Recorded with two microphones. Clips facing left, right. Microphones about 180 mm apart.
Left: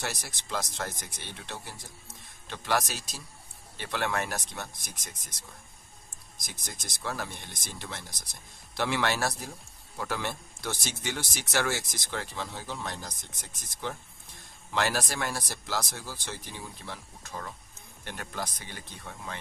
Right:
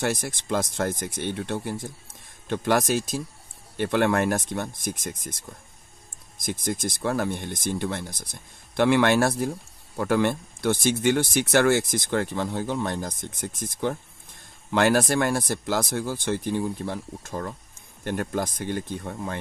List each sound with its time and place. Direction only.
0.0 s speech: 50° right (ahead or behind)